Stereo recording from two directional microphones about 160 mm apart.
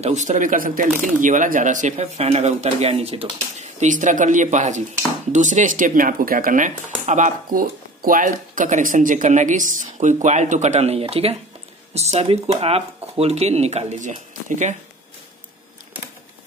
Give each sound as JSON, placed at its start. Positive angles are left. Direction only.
{"t": 0.0, "sound": "speech", "side_deg": -45}